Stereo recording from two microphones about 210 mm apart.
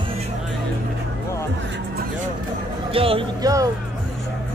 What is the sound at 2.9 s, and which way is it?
Speech, 25° right (ahead or behind).